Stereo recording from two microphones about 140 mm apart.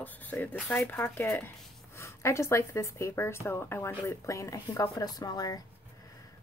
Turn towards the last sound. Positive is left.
turn(degrees=25)  # may be behind; listen again after turning